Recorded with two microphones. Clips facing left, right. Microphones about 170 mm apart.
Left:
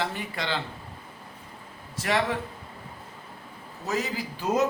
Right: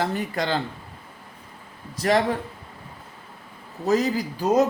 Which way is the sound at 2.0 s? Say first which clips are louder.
Right 5 dB; 40° right (ahead or behind).